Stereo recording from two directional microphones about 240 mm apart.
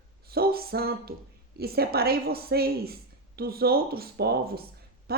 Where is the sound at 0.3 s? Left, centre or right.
Right.